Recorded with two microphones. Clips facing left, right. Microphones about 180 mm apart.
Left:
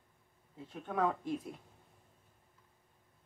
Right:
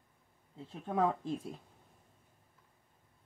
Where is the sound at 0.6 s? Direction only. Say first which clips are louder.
Right 2 dB; 30° right (ahead or behind).